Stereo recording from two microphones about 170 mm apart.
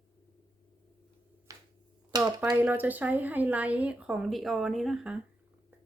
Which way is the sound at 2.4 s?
10° right (ahead or behind).